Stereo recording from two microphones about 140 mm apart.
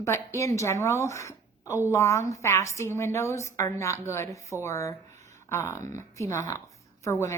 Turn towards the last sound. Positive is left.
turn(degrees=20)  # may be behind; listen again after turning